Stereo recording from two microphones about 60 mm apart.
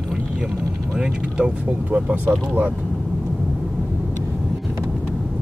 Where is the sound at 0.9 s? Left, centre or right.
Centre.